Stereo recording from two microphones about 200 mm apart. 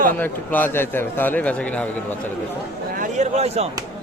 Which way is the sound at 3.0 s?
35° right (ahead or behind).